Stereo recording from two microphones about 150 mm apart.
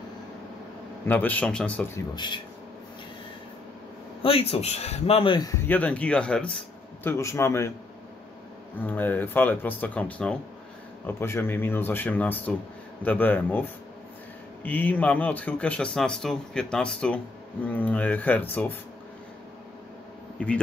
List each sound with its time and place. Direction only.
1.0 s speech: 10° left (ahead or behind)
2.0 s speech: 30° left (ahead or behind)
4.2 s a man's voice: 40° left (ahead or behind)
5.5 s speech: 10° left (ahead or behind)
8.7 s speech: 10° left (ahead or behind)
20.3 s a man's voice: 10° left (ahead or behind)